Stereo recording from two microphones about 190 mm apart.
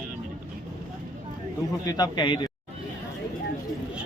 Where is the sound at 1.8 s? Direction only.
20° left (ahead or behind).